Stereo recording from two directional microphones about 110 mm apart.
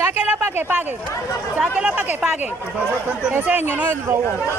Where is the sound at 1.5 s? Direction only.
10° right (ahead or behind).